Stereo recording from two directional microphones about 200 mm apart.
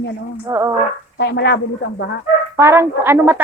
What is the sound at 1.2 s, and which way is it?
Speech, 60° left (ahead or behind).